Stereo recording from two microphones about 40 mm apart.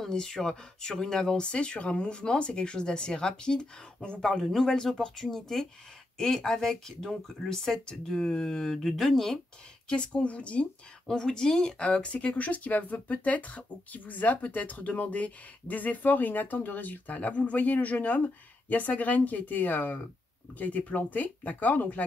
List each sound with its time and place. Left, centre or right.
0.0 s speech: centre
4.3 s speech: centre
9.8 s speech: left
11.1 s speech: centre
11.8 s speech: left